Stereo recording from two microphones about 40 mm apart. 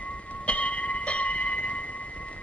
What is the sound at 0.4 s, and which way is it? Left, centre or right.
Music, left.